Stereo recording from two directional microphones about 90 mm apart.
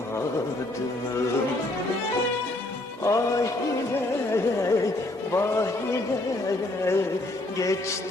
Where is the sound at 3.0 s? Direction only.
35° left (ahead or behind).